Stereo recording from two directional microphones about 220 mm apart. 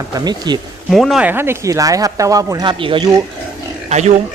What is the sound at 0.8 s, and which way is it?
Speech, centre (ahead or behind).